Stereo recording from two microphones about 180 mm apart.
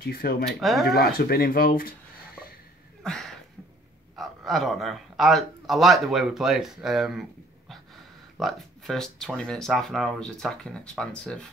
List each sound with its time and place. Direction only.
0.0 s speech: 55° left (ahead or behind)
0.5 s speech: centre (ahead or behind)
0.8 s speech: 60° left (ahead or behind)
3.0 s a sound: 5° left (ahead or behind)
4.2 s speech: centre (ahead or behind)